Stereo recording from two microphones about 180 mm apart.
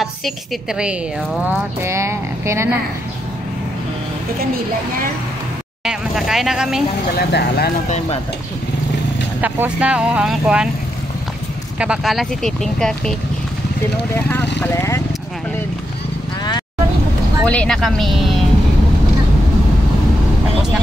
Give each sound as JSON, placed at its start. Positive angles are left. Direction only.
{"t": 0.0, "sound": "a woman's voice", "side_deg": 0}
{"t": 1.5, "sound": "speech", "side_deg": -15}
{"t": 5.9, "sound": "speech", "side_deg": 0}
{"t": 7.2, "sound": "speech", "side_deg": 60}
{"t": 9.4, "sound": "speech", "side_deg": -10}
{"t": 11.8, "sound": "speech", "side_deg": -5}
{"t": 14.1, "sound": "speech", "side_deg": 10}
{"t": 17.5, "sound": "speech", "side_deg": 5}